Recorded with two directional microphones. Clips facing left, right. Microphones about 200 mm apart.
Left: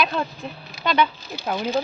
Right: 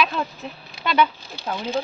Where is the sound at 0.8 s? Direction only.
5° right (ahead or behind).